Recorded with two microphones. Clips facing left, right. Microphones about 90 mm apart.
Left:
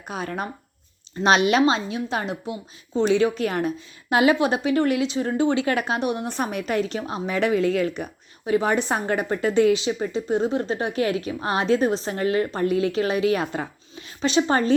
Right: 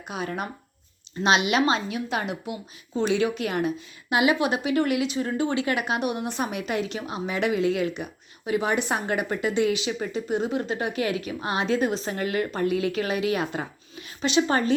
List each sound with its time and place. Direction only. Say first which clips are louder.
0.1 s a woman's voice: left 2 dB; 35° left (ahead or behind)